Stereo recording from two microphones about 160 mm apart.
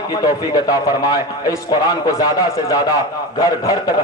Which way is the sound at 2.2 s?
20° left (ahead or behind).